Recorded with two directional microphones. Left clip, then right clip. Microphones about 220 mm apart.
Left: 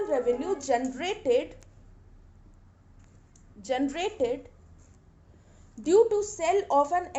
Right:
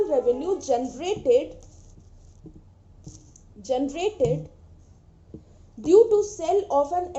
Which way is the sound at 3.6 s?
25° left (ahead or behind).